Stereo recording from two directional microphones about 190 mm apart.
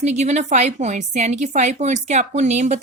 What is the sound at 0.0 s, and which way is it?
A woman's voice, 35° right (ahead or behind).